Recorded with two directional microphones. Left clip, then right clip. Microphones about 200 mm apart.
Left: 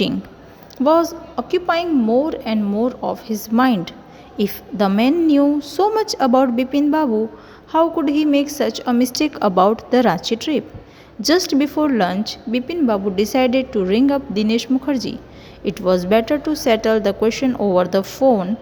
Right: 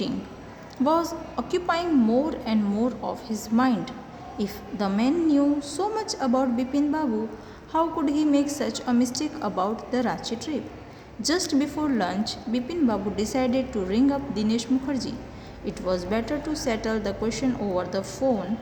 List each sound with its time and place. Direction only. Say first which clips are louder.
0.9 s a woman's voice: left 9 dB; 35° left (ahead or behind)